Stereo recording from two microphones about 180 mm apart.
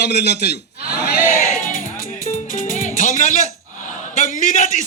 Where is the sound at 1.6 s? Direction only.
50° left (ahead or behind).